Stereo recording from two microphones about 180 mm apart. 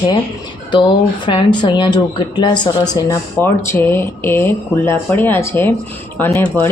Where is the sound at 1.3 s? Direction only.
30° left (ahead or behind).